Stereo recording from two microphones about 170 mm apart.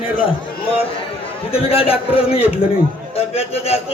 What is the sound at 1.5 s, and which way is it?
A man's voice, 35° left (ahead or behind).